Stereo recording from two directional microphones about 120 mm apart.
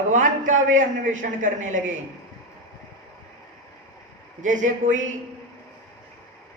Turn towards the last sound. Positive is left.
turn(degrees=-90)